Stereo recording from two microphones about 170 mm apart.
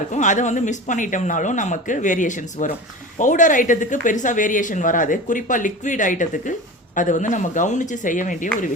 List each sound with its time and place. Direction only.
0.1 s speech: 45° left (ahead or behind)